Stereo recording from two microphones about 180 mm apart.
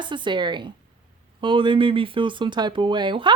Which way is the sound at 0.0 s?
25° right (ahead or behind).